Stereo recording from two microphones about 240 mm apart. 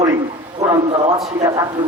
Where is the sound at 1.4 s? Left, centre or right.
Centre.